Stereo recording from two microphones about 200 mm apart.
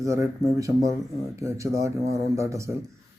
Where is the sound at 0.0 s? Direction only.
15° right (ahead or behind).